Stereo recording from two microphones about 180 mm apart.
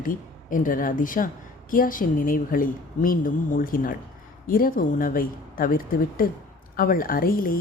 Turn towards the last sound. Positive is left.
turn(degrees=50)  # may be behind; listen again after turning